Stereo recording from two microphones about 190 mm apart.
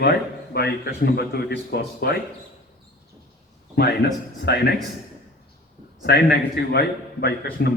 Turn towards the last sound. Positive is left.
turn(degrees=55)  # may be behind; listen again after turning